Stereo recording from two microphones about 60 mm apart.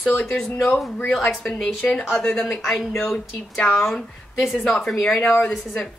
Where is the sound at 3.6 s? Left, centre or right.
Centre.